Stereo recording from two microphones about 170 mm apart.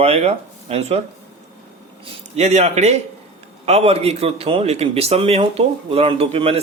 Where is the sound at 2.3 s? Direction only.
40° right (ahead or behind).